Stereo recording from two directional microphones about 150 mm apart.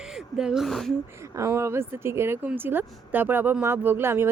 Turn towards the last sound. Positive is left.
turn(degrees=-15)  # may be behind; listen again after turning